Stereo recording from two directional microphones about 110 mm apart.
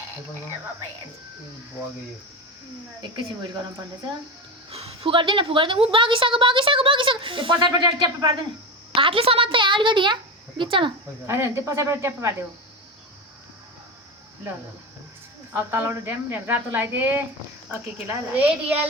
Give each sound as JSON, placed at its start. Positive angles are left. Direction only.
{"t": 3.0, "sound": "a woman's voice", "side_deg": -40}
{"t": 4.7, "sound": "a woman's voice", "side_deg": -65}
{"t": 9.0, "sound": "a woman's voice", "side_deg": -55}
{"t": 11.3, "sound": "a woman's voice", "side_deg": -25}
{"t": 15.5, "sound": "a woman's voice", "side_deg": -20}
{"t": 18.3, "sound": "a woman's voice", "side_deg": -15}